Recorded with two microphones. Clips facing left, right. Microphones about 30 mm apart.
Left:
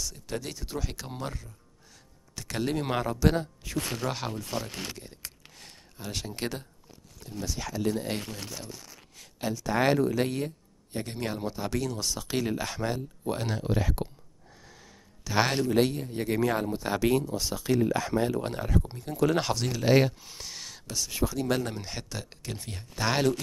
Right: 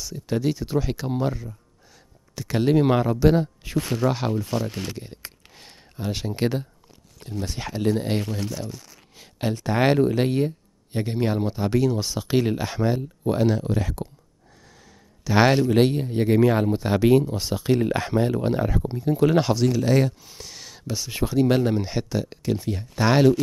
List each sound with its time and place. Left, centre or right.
0.0 s speech: centre
3.6 s speech: right
7.2 s speech: right
8.5 s a sound: right
9.7 s speech: right; by 13.9 s centre
14.7 s a sound: centre
15.2 s speech: centre
18.4 s speech: centre
19.3 s speech: centre
19.8 s speech: centre
20.2 s speech: centre